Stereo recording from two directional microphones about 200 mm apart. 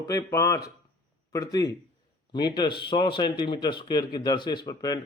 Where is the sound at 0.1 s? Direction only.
15° left (ahead or behind).